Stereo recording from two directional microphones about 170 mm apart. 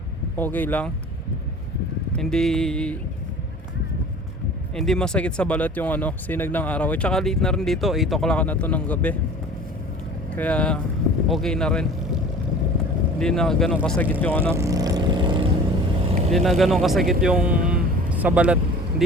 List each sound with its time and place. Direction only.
0.3 s speech: 10° left (ahead or behind)
2.1 s a man's voice: 5° left (ahead or behind)
4.7 s speech: centre (ahead or behind)
10.3 s a man's voice: 10° left (ahead or behind)
14.5 s vehicle: 20° right (ahead or behind)
16.3 s a man's voice: centre (ahead or behind)
17.2 s vehicle: 5° right (ahead or behind)